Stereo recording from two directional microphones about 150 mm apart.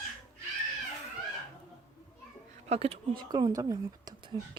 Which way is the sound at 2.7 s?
40° right (ahead or behind).